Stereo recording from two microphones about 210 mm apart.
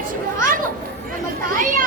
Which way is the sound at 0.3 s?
40° right (ahead or behind).